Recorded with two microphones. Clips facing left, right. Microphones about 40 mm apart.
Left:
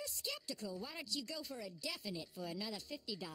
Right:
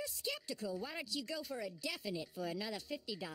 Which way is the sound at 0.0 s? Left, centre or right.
Centre.